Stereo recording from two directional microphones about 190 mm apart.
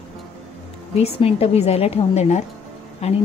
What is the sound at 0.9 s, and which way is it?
A woman's voice, 30° left (ahead or behind).